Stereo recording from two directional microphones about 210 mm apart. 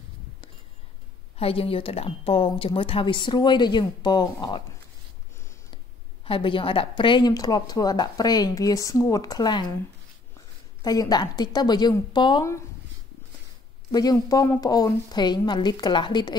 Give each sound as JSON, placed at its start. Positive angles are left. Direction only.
{"t": 1.3, "sound": "a woman's voice", "side_deg": 25}
{"t": 6.2, "sound": "a woman's voice", "side_deg": 25}
{"t": 10.8, "sound": "a woman's voice", "side_deg": 20}
{"t": 13.9, "sound": "a woman's voice", "side_deg": 15}